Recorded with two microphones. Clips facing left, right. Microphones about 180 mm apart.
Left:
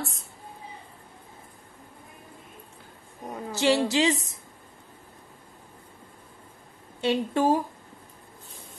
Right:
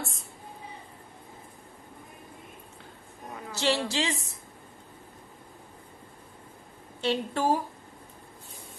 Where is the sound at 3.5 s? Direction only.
15° left (ahead or behind).